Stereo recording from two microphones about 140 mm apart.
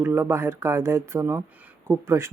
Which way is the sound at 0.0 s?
20° right (ahead or behind).